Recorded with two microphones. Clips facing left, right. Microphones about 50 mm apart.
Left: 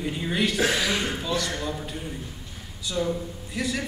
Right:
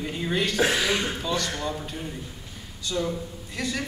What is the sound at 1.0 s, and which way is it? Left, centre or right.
Speech, centre.